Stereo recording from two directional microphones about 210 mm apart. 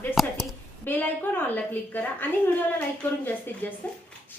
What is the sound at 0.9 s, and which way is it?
A woman's voice, 10° left (ahead or behind).